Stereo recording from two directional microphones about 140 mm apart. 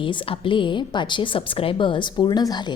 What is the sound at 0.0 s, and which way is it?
A woman's voice, 35° left (ahead or behind).